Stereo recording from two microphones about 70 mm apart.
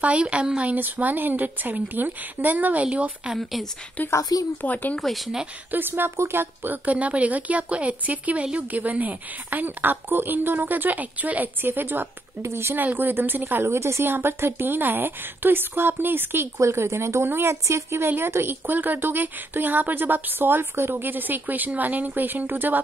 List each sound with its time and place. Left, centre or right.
0.0 s speech: centre
4.1 s speech: left
4.6 s speech: left
4.9 s speech: centre
5.7 s speech: right
16.5 s speech: right